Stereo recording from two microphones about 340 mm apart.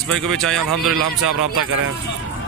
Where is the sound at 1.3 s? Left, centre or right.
Right.